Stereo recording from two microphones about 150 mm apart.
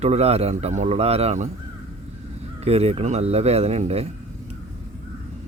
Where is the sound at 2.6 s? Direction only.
45° right (ahead or behind).